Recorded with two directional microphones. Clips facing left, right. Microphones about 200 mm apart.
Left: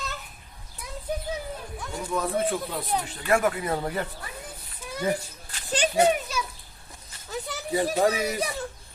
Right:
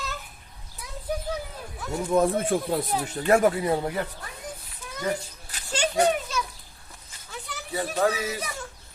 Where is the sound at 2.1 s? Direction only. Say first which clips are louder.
Right 8 dB; 35° right (ahead or behind).